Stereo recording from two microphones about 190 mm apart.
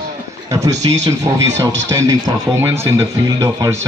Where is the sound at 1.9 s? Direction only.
15° right (ahead or behind).